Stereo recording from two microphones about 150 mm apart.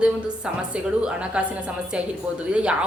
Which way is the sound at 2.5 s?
5° right (ahead or behind).